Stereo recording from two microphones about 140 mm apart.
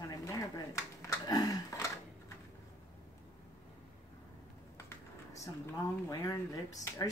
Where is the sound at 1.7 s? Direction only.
25° left (ahead or behind).